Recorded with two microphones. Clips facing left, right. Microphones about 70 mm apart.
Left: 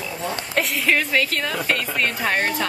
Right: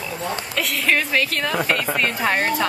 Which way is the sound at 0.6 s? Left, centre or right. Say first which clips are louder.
Even; centre.